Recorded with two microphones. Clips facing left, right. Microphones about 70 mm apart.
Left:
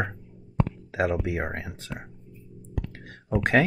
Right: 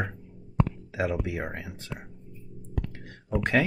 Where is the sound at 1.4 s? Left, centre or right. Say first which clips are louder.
Left 3 dB; left.